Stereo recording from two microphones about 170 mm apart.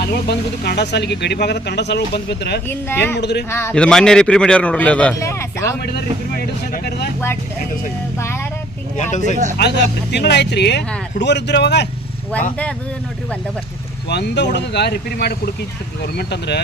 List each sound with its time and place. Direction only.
0.0 s speech: 70° left (ahead or behind)
2.6 s a man's voice: 10° left (ahead or behind)
3.2 s speech: 80° left
3.5 s a man's voice: 15° left (ahead or behind)
9.0 s speech: 45° left (ahead or behind)
9.6 s speech: 80° left
14.1 s speech: 85° left